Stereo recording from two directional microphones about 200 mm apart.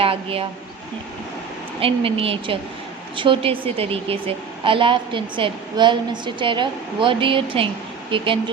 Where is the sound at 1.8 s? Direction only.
25° right (ahead or behind).